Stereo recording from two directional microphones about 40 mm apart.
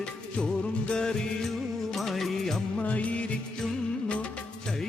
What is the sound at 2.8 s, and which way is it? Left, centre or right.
Music, left.